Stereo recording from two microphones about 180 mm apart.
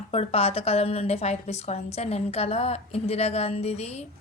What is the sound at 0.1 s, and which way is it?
A woman's voice, 35° left (ahead or behind).